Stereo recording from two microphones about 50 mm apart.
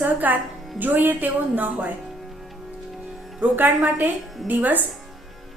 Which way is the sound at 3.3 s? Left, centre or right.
Right.